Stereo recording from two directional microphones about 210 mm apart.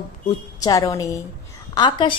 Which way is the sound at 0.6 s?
15° left (ahead or behind).